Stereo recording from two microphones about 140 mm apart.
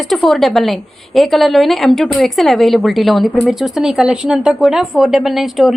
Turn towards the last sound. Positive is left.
turn(degrees=0)  # may be behind; listen again after turning